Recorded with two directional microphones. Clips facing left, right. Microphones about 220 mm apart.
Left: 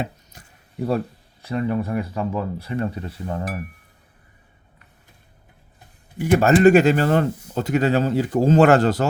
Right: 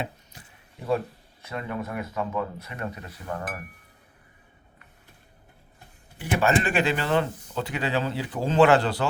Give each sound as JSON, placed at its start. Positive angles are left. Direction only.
{"t": 1.4, "sound": "speech", "side_deg": 35}
{"t": 6.1, "sound": "speech", "side_deg": 45}